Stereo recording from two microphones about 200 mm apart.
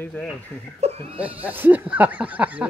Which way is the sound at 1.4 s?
10° right (ahead or behind).